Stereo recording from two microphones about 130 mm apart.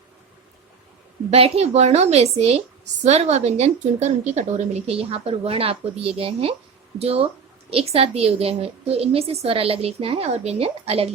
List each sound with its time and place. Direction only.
1.3 s a woman's voice: 50° right (ahead or behind)